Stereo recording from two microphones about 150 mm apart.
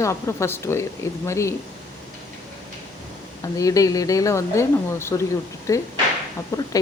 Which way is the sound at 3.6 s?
25° left (ahead or behind).